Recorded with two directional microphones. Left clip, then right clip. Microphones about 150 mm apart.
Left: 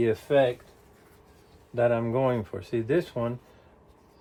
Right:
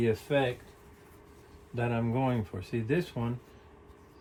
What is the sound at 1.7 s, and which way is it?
Speech, 55° left (ahead or behind).